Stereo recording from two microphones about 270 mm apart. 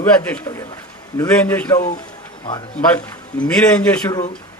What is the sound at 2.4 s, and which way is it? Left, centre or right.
Speech, centre.